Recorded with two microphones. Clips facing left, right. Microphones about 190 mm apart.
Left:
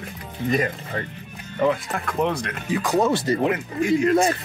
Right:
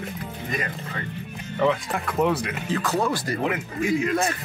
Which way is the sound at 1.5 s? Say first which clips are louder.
Left 1 dB; centre (ahead or behind).